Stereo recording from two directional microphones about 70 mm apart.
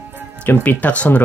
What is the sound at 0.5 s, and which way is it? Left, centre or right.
Speech, left.